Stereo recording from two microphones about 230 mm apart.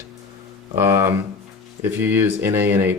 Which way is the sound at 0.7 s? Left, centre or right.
Centre.